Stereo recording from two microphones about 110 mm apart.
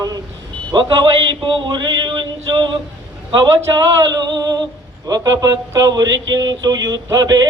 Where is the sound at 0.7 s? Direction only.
45° right (ahead or behind).